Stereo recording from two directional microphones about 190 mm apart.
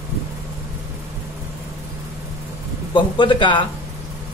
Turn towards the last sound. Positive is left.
turn(degrees=25)  # may be behind; listen again after turning